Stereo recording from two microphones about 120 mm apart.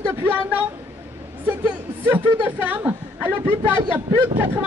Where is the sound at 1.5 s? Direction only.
15° right (ahead or behind).